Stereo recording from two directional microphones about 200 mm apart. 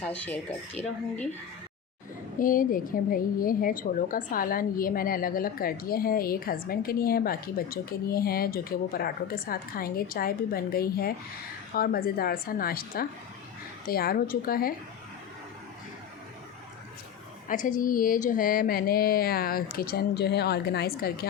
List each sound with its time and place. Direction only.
0.0 s speech: 5° left (ahead or behind)
2.4 s a woman's voice: 45° left (ahead or behind)
17.5 s a woman's voice: 40° left (ahead or behind)